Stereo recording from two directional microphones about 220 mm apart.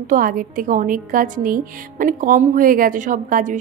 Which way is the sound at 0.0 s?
40° right (ahead or behind).